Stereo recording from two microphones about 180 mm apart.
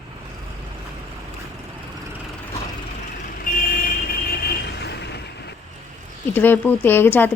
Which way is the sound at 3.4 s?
55° left (ahead or behind).